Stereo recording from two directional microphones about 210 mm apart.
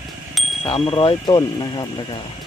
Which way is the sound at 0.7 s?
25° left (ahead or behind).